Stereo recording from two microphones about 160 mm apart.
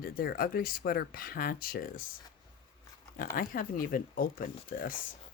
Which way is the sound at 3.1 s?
65° left (ahead or behind).